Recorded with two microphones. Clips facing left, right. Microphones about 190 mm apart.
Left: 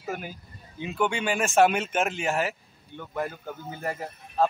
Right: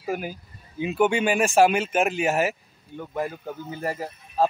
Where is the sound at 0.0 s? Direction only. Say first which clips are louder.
Right 5 dB; 10° right (ahead or behind).